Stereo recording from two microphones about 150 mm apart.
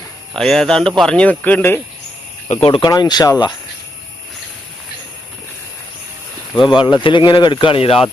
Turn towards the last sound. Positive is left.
turn(degrees=35)  # may be behind; listen again after turning